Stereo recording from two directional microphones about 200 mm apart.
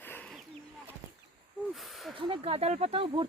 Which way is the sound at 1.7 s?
Centre (ahead or behind).